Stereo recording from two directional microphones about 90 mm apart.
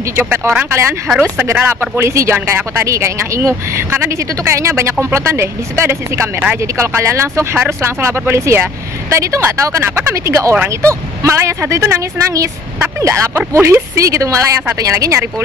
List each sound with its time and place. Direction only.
0.2 s a woman's voice: 25° right (ahead or behind)